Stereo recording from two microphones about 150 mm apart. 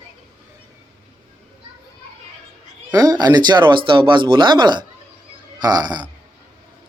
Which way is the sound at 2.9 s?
25° right (ahead or behind).